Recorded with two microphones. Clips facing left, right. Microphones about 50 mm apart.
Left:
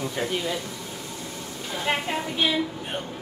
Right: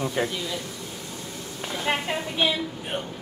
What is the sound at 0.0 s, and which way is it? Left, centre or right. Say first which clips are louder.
Speech: right 3 dB; centre.